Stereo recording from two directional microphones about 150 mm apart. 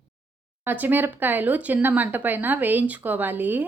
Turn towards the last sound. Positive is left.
turn(degrees=-10)  # may be behind; listen again after turning